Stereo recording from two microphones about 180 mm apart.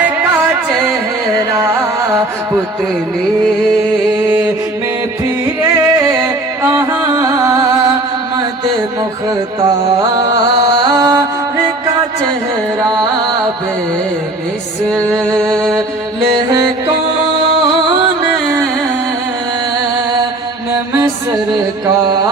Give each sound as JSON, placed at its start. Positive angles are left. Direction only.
{"t": 0.0, "sound": "music", "side_deg": -15}
{"t": 5.7, "sound": "music", "side_deg": -15}
{"t": 9.6, "sound": "music", "side_deg": -30}
{"t": 15.2, "sound": "music", "side_deg": 5}
{"t": 16.5, "sound": "music", "side_deg": -25}
{"t": 21.8, "sound": "carnatic music", "side_deg": -25}